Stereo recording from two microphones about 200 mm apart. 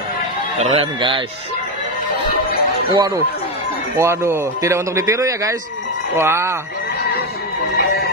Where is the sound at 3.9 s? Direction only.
15° right (ahead or behind).